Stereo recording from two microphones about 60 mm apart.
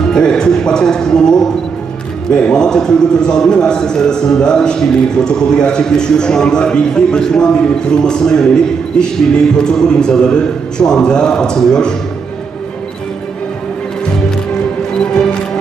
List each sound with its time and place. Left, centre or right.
0.0 s a man's voice: centre
14.0 s music: centre